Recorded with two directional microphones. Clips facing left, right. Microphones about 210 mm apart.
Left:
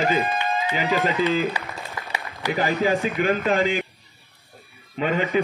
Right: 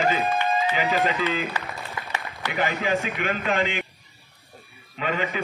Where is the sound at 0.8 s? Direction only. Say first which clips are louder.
Left 4 dB; 15° right (ahead or behind).